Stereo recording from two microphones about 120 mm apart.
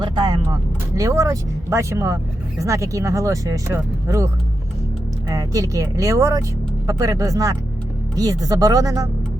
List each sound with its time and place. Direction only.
0.0 s speech: 40° right (ahead or behind)
0.9 s speech: 25° right (ahead or behind)
5.3 s speech: 30° right (ahead or behind)